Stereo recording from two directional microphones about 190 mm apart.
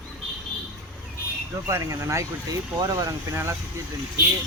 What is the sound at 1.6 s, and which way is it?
Speech, 15° right (ahead or behind).